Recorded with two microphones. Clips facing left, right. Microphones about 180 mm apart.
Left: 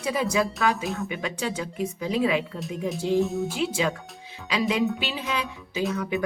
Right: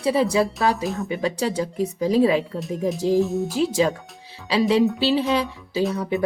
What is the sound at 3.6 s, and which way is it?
Speech, 35° right (ahead or behind).